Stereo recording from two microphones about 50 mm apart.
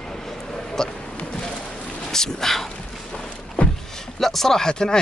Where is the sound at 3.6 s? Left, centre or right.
Left.